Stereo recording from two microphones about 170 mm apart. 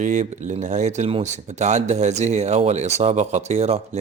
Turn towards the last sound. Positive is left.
turn(degrees=-40)  # may be behind; listen again after turning